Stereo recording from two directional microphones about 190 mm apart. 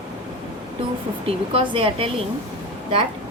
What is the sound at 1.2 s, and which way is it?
Speech, 30° right (ahead or behind).